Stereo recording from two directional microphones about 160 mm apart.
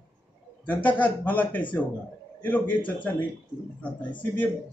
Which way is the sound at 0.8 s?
10° left (ahead or behind).